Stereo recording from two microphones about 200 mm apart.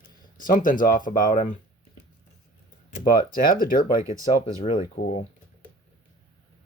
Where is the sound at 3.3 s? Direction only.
45° left (ahead or behind).